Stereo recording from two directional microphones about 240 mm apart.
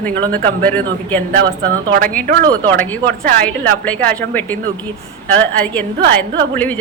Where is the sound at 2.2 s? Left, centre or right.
Right.